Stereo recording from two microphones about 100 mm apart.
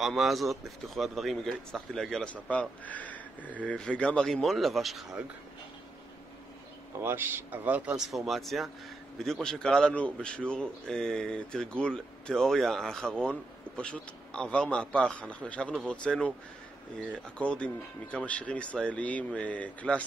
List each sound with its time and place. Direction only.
0.0 s a man's voice: centre (ahead or behind)
7.0 s speech: 20° right (ahead or behind)
8.0 s a man's voice: centre (ahead or behind)